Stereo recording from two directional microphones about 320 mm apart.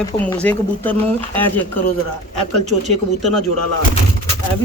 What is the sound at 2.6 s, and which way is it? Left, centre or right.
Speech, right.